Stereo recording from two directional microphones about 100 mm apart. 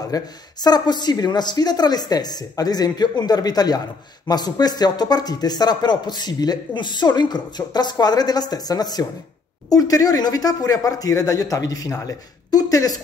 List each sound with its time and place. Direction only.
0.1 s speech: 40° left (ahead or behind)